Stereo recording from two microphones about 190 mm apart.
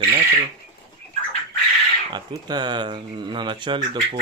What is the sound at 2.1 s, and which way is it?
Speech, 20° right (ahead or behind).